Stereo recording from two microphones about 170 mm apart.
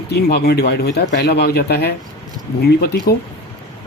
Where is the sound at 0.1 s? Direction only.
75° left (ahead or behind).